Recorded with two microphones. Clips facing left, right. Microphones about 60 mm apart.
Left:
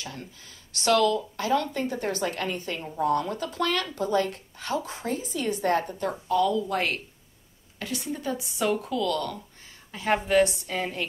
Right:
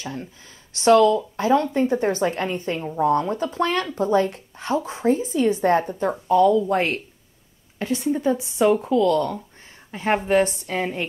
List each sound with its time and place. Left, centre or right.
0.0 s a woman's voice: right